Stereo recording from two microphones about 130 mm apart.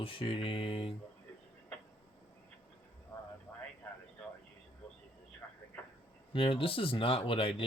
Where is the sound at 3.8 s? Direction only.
15° left (ahead or behind).